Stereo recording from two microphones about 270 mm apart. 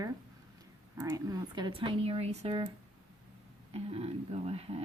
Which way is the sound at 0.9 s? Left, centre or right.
Centre.